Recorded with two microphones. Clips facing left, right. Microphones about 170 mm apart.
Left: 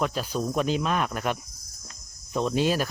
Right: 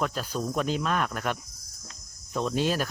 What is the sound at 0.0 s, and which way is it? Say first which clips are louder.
Speech: left 2 dB; 10° left (ahead or behind).